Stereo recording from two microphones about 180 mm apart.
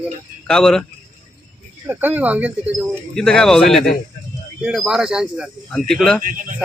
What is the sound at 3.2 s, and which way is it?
Speech, 5° left (ahead or behind).